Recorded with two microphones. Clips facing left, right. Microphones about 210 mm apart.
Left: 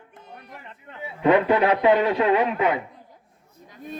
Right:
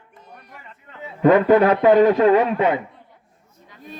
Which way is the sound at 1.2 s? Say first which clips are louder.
Right 5 dB; 45° right (ahead or behind).